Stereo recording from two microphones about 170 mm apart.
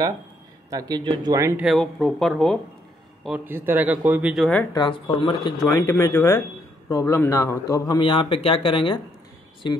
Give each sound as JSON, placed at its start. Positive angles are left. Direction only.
{"t": 0.7, "sound": "speech", "side_deg": -20}
{"t": 1.6, "sound": "speech", "side_deg": 0}
{"t": 3.3, "sound": "speech", "side_deg": -10}
{"t": 4.7, "sound": "speech", "side_deg": 25}
{"t": 5.7, "sound": "speech", "side_deg": 15}